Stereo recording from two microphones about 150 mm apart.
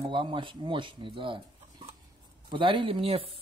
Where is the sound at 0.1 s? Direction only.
35° right (ahead or behind).